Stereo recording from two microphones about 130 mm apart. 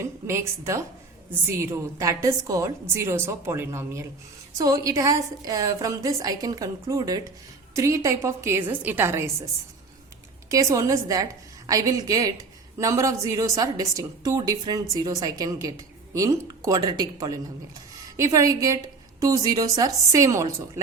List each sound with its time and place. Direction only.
0.0 s a woman's voice: 20° right (ahead or behind)
10.5 s a woman's voice: 25° right (ahead or behind)